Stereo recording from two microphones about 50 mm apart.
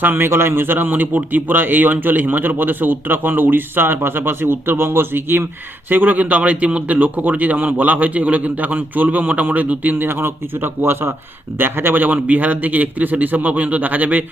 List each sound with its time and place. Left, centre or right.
0.0 s a man's voice: right
5.9 s a man's voice: right
9.9 s a man's voice: right